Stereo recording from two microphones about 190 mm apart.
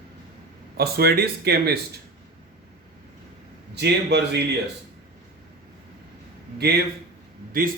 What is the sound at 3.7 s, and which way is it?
Speech, 60° right (ahead or behind).